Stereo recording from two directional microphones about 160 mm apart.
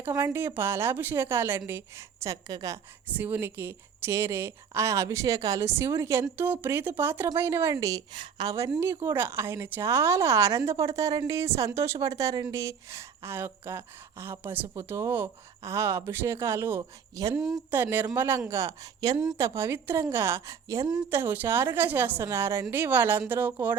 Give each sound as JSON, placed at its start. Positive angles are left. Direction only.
{"t": 0.0, "sound": "a woman's voice", "side_deg": -15}
{"t": 3.1, "sound": "a woman's voice", "side_deg": -10}
{"t": 17.3, "sound": "speech", "side_deg": 0}
{"t": 17.7, "sound": "a woman's voice", "side_deg": -15}